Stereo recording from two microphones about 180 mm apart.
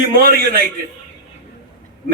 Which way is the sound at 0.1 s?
55° right (ahead or behind).